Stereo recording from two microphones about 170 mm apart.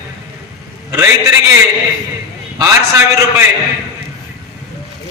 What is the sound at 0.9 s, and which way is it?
Speech, 15° right (ahead or behind).